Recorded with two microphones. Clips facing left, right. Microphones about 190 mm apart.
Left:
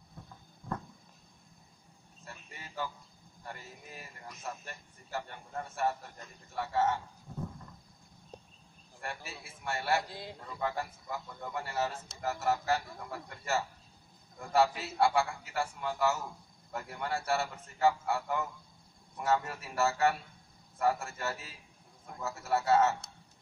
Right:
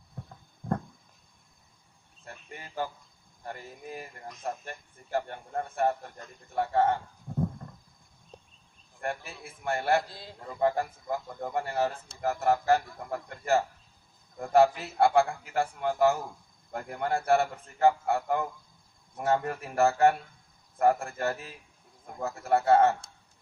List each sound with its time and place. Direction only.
2.2 s a sound: 50° right (ahead or behind)
3.4 s speech: 50° right (ahead or behind)
9.0 s speech: 55° right (ahead or behind)
10.0 s a man's voice: 15° left (ahead or behind)
10.4 s a man's voice: 45° right (ahead or behind)